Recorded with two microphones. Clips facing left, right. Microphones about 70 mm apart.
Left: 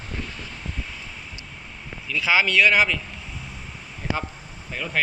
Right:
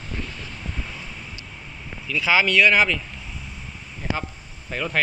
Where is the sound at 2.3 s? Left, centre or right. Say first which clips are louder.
Right 1 dB; left.